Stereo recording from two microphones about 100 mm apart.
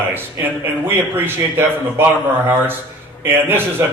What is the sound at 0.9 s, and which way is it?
A man's voice, 20° right (ahead or behind).